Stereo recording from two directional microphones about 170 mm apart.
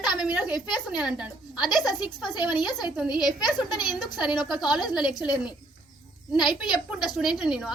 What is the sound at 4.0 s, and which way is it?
A woman's voice, 5° right (ahead or behind).